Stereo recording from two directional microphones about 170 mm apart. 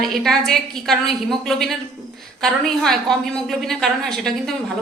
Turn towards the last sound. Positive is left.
turn(degrees=0)  # may be behind; listen again after turning